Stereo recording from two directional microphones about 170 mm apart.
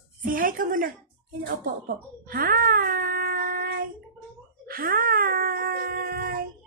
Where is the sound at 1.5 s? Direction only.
60° right (ahead or behind).